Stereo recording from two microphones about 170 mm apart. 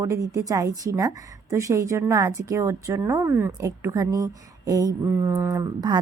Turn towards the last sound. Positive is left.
turn(degrees=-25)  # may be behind; listen again after turning